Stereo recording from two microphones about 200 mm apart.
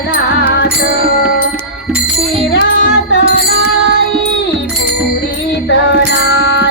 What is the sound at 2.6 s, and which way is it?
Music, 65° left (ahead or behind).